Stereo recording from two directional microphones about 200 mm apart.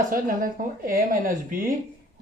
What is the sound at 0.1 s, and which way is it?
Speech, 45° right (ahead or behind).